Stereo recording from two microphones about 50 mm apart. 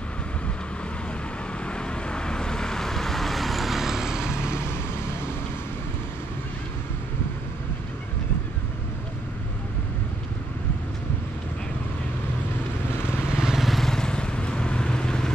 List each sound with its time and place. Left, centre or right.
1.7 s vehicle: centre
13.4 s vehicle: centre
13.7 s vehicle: centre